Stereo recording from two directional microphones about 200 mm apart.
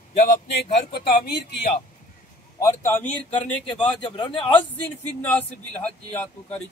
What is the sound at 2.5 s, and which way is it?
Speech, 15° left (ahead or behind).